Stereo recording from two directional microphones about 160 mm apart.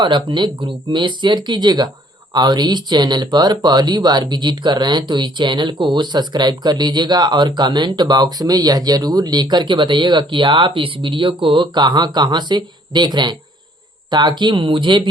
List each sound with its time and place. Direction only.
0.0 s speech: 30° right (ahead or behind)